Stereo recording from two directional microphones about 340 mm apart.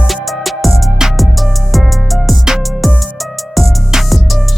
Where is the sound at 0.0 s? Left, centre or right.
Centre.